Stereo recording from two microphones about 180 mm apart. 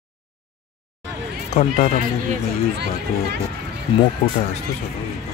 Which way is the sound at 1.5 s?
40° left (ahead or behind).